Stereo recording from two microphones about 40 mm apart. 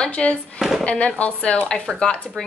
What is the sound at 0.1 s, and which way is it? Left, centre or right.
Speech, left.